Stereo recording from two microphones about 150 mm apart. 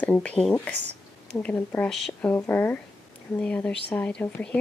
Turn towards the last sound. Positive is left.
turn(degrees=10)  # may be behind; listen again after turning